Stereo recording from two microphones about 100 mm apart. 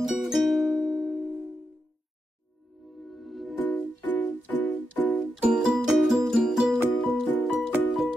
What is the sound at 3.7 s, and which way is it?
Music, 15° left (ahead or behind).